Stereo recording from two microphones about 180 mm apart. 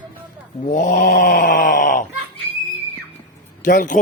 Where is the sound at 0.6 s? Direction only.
45° left (ahead or behind).